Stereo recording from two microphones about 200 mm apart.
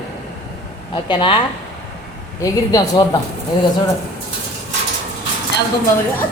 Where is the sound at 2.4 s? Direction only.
20° left (ahead or behind).